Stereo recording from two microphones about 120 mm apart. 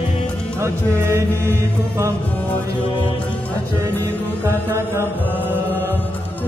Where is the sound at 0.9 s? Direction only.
20° right (ahead or behind).